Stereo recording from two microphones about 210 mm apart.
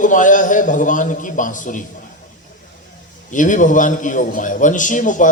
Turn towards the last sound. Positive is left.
turn(degrees=40)  # may be behind; listen again after turning